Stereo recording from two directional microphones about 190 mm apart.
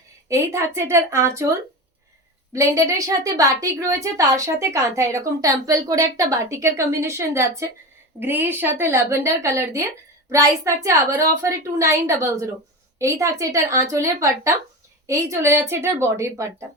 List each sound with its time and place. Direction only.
0.3 s a woman's voice: 15° right (ahead or behind)